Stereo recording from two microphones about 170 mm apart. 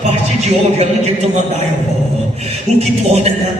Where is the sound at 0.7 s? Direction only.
40° right (ahead or behind).